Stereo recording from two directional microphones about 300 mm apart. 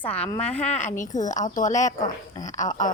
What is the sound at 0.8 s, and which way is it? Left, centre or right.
A woman's voice, left.